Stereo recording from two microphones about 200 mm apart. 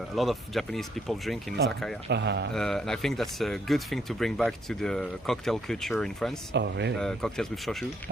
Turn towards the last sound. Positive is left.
turn(degrees=0)  # may be behind; listen again after turning